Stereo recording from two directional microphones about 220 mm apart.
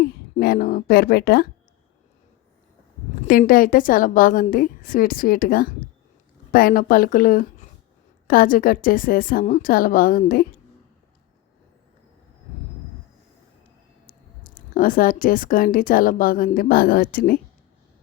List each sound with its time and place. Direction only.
0.0 s a woman's voice: 45° left (ahead or behind)
3.2 s a woman's voice: 40° left (ahead or behind)
14.1 s speech: 40° left (ahead or behind)